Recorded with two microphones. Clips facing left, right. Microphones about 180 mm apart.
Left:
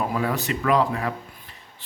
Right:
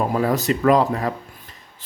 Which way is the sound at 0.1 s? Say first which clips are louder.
Right 5 dB; 40° right (ahead or behind).